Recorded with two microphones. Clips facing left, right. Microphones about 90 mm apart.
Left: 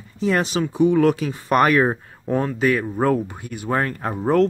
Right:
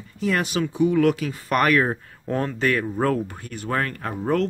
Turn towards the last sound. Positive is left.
turn(degrees=30)  # may be behind; listen again after turning